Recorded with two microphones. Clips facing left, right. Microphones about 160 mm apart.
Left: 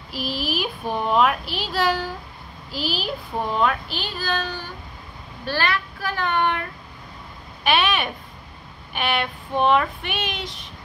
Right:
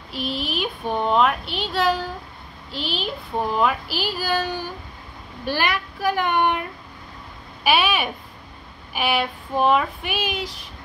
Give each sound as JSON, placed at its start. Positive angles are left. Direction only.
{"t": 0.1, "sound": "speech", "side_deg": 0}
{"t": 7.6, "sound": "speech", "side_deg": -5}